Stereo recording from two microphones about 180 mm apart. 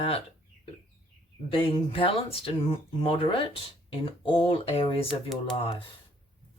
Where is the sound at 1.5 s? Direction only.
30° left (ahead or behind).